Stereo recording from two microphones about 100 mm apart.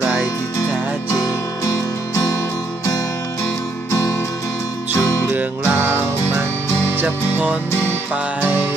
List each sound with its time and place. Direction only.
1.1 s music: 35° left (ahead or behind)
4.9 s music: 30° left (ahead or behind)
5.3 s music: 20° right (ahead or behind)